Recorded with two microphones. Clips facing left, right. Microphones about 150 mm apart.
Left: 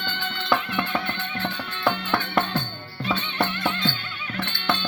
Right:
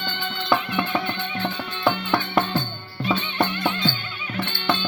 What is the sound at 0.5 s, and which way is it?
Music, 5° right (ahead or behind).